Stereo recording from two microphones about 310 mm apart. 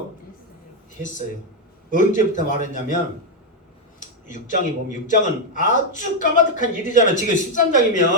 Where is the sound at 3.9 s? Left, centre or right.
Left.